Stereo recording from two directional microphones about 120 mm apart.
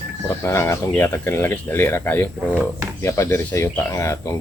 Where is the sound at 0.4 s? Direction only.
20° left (ahead or behind).